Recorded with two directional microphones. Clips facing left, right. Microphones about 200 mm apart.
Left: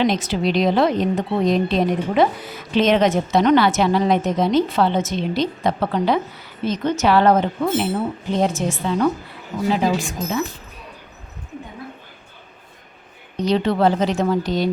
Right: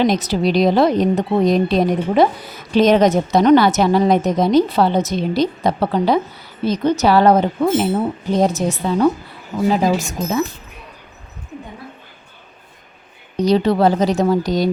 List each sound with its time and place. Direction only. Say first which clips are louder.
0.0 s a woman's voice: right 3 dB; 40° right (ahead or behind)
13.3 s a woman's voice: right 4 dB; 35° right (ahead or behind)